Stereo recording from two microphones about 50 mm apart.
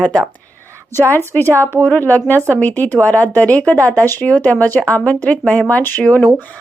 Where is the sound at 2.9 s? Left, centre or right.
Left.